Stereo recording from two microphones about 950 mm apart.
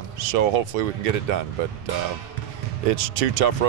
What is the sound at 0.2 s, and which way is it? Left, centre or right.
Speech, right.